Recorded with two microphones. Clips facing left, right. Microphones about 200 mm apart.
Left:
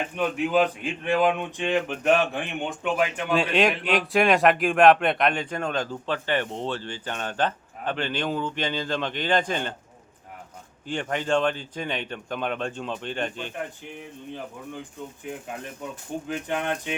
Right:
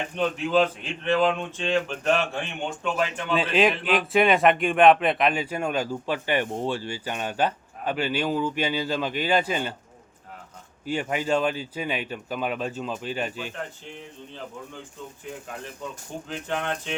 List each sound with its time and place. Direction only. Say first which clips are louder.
0.2 s speech: even; 15° left (ahead or behind)
3.3 s speech: right 1 dB; centre (ahead or behind)
10.8 s speech: right 1 dB; 5° right (ahead or behind)
16.3 s speech: left 1 dB; 10° left (ahead or behind)